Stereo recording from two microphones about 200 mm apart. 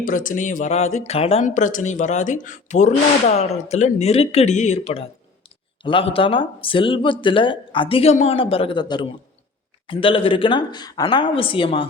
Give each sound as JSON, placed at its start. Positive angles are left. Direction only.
{"t": 0.0, "sound": "speech", "side_deg": 40}